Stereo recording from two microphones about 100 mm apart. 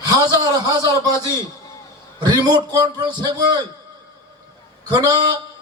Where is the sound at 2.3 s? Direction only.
45° right (ahead or behind).